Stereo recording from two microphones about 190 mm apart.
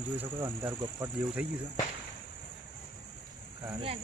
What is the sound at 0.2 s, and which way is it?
Speech, 10° right (ahead or behind).